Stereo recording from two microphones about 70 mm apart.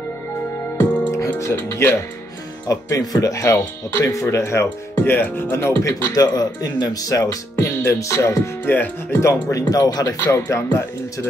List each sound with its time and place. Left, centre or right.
0.7 s music: left
1.1 s speech: left
2.7 s speech: left
6.1 s speech: left
7.5 s speech: left
9.2 s speech: left
10.3 s speech: left